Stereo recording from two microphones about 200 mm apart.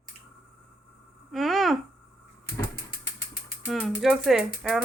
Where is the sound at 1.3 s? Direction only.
Centre (ahead or behind).